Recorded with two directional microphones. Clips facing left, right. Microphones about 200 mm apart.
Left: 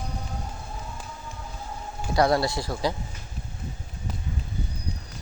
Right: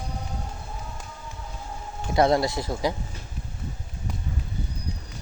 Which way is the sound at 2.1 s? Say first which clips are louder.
Right 1 dB; 20° right (ahead or behind).